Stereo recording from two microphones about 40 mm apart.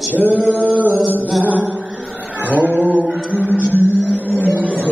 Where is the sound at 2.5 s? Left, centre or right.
Right.